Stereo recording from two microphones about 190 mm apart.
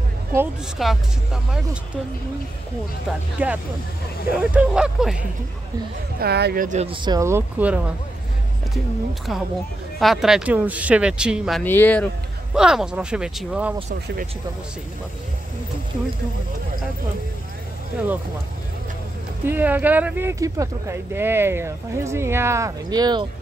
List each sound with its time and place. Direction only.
0.7 s speech: centre (ahead or behind)
3.4 s speech: 10° right (ahead or behind)
6.1 s speech: 60° right (ahead or behind); by 6.9 s 45° right (ahead or behind)
6.9 s speech: 20° right (ahead or behind); by 11.6 s 5° right (ahead or behind)
11.6 s speech: 10° left (ahead or behind)
12.5 s speech: 5° right (ahead or behind)
19.4 s speech: 10° right (ahead or behind)